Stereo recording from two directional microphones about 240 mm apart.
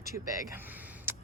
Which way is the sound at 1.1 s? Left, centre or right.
Centre.